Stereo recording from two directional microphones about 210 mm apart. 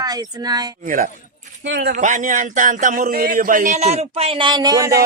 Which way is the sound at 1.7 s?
55° right (ahead or behind).